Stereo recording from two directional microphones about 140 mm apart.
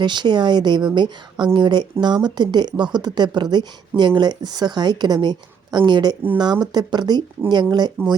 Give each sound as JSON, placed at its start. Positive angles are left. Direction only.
{"t": 0.0, "sound": "speech", "side_deg": -35}